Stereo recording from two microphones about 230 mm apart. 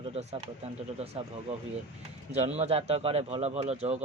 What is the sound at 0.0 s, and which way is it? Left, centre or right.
Speech, right.